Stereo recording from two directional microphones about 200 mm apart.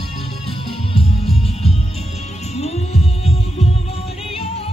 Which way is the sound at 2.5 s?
30° left (ahead or behind).